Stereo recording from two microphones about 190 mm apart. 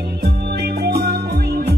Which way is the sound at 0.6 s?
60° right (ahead or behind).